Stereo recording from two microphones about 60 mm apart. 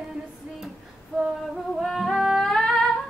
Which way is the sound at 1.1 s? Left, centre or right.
Centre.